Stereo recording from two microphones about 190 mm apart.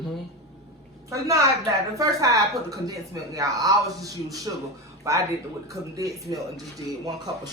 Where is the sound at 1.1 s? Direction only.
15° right (ahead or behind).